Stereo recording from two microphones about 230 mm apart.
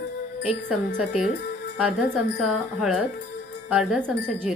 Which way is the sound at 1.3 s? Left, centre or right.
Left.